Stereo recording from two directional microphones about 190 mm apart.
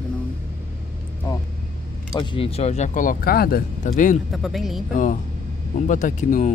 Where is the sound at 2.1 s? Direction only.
25° left (ahead or behind); by 4.2 s 40° left (ahead or behind).